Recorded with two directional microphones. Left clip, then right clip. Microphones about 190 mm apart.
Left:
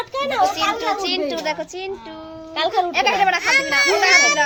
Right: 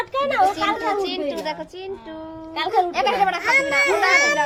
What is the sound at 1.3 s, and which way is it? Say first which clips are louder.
A woman's voice: left 3 dB; 15° left (ahead or behind).